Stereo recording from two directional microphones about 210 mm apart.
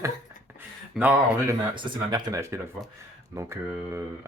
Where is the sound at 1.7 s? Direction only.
20° right (ahead or behind).